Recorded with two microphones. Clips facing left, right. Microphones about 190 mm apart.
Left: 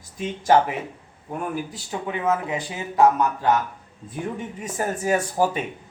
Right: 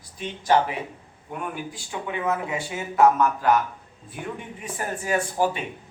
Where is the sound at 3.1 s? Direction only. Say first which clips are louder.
Even; 20° left (ahead or behind).